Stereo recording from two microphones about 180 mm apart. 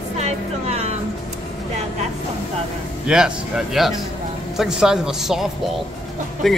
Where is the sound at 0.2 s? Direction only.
40° right (ahead or behind).